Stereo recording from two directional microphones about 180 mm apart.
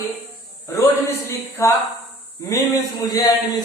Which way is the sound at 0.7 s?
15° left (ahead or behind).